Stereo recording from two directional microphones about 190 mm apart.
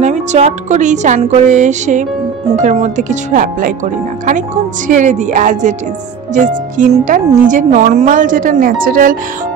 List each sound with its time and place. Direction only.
0.0 s speech: 40° right (ahead or behind)
4.8 s speech: 40° right (ahead or behind)